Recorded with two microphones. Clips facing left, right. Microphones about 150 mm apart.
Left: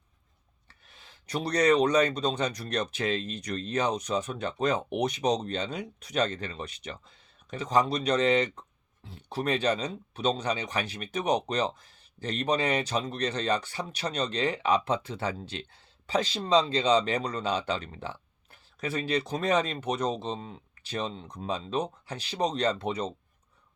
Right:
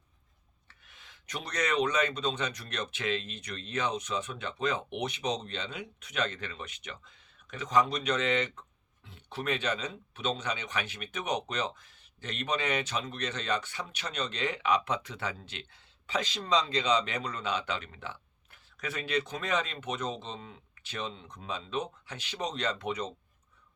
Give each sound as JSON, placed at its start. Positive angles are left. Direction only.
{"t": 0.7, "sound": "speech", "side_deg": 35}